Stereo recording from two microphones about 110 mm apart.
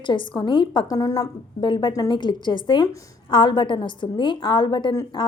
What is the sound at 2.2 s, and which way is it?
A woman's voice, 45° left (ahead or behind).